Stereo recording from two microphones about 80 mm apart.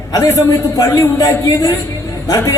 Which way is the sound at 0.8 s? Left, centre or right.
Left.